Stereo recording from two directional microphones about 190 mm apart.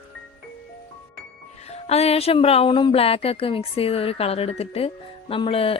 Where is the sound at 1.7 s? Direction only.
35° left (ahead or behind).